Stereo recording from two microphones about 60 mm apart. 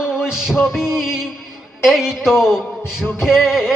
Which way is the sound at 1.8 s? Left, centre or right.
Centre.